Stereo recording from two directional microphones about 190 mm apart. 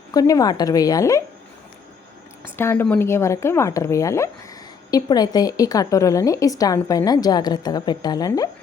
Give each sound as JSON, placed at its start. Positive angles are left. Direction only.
{"t": 0.1, "sound": "a woman's voice", "side_deg": 20}
{"t": 2.6, "sound": "a woman's voice", "side_deg": 10}